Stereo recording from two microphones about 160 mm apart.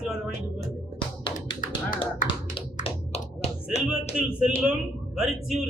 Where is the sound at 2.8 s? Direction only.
40° left (ahead or behind).